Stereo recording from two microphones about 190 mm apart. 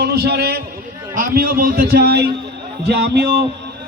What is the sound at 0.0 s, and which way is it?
A man's voice, 60° right (ahead or behind).